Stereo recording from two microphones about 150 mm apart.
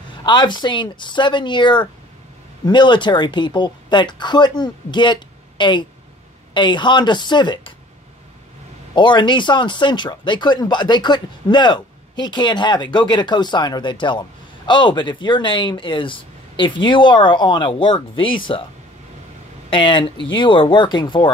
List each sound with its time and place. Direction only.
0.1 s speech: 30° left (ahead or behind)
8.9 s speech: 30° left (ahead or behind)
19.7 s speech: 35° left (ahead or behind)